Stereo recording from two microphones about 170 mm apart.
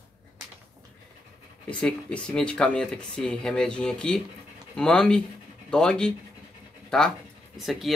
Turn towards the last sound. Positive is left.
turn(degrees=0)  # may be behind; listen again after turning